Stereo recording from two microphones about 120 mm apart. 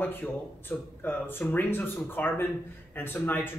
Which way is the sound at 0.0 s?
15° left (ahead or behind).